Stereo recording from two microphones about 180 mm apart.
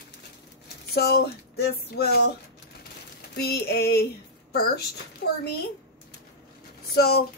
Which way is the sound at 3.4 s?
65° left (ahead or behind).